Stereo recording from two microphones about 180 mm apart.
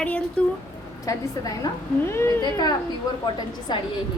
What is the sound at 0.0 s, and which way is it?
Speech, 5° left (ahead or behind).